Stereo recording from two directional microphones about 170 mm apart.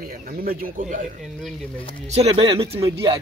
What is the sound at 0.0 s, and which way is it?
Speech, 55° right (ahead or behind).